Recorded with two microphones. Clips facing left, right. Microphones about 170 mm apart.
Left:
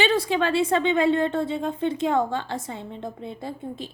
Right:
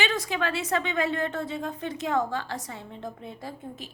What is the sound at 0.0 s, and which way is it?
A woman's voice, 30° left (ahead or behind).